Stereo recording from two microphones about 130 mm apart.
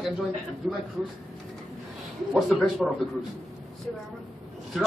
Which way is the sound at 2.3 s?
5° right (ahead or behind).